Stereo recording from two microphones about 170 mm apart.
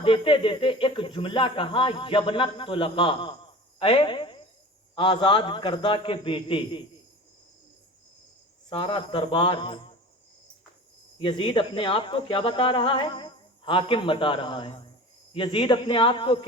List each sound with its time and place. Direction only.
0.0 s speech: 30° left (ahead or behind)
8.7 s speech: 30° left (ahead or behind)
11.2 s speech: 30° left (ahead or behind)